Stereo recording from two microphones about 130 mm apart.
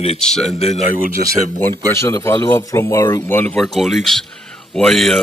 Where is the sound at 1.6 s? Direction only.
20° left (ahead or behind).